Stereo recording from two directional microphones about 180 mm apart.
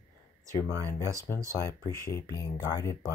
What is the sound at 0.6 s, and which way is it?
Speech, 15° left (ahead or behind).